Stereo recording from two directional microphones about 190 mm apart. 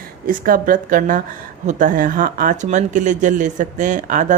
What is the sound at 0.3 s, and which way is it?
Speech, 45° right (ahead or behind).